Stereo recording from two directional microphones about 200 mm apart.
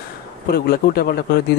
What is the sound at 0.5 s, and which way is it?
Speech, 50° left (ahead or behind).